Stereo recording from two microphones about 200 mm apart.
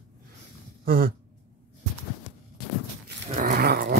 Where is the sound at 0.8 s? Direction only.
45° right (ahead or behind).